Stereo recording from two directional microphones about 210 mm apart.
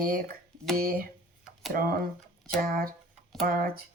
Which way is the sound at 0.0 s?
45° right (ahead or behind).